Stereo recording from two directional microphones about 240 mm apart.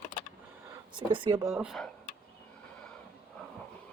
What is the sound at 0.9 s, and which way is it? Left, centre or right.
Speech, centre.